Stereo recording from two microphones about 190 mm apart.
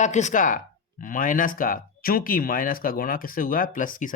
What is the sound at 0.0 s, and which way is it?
Speech, 40° left (ahead or behind).